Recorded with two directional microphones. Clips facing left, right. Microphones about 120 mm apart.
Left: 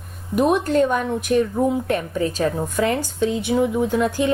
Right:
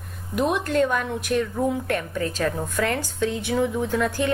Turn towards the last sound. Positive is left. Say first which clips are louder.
# left 4 dB
turn(degrees=20)  # may be behind; listen again after turning